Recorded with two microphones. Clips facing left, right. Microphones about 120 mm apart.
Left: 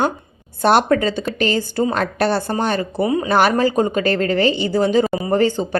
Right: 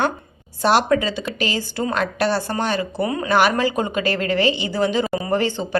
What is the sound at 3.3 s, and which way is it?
A woman's voice, 45° left (ahead or behind).